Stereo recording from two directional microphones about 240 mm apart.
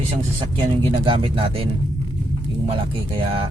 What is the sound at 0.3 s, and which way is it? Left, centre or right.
Speech, centre.